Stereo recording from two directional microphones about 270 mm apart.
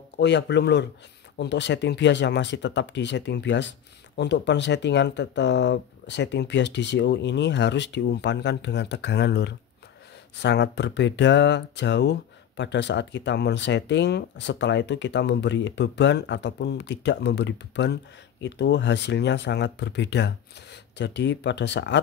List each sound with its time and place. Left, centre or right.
0.2 s speech: left